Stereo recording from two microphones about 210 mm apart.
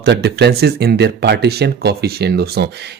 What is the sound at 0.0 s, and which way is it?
A man's voice, 50° right (ahead or behind).